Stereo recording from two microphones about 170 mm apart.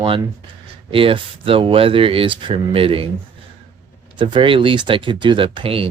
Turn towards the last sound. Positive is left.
turn(degrees=-35)  # may be behind; listen again after turning